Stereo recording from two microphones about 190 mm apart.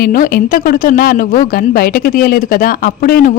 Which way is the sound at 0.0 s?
50° left (ahead or behind).